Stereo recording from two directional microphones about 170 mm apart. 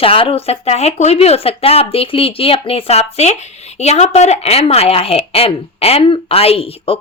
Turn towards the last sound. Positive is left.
turn(degrees=35)  # may be behind; listen again after turning